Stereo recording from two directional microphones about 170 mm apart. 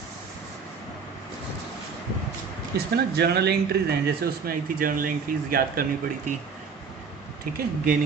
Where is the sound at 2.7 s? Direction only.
70° right (ahead or behind).